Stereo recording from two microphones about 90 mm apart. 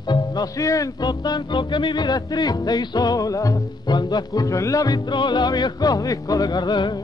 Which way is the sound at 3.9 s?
55° left (ahead or behind).